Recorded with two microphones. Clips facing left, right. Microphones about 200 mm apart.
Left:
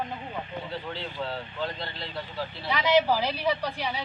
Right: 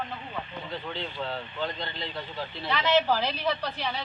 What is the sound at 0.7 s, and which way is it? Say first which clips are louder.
Speech: even; 5° left (ahead or behind).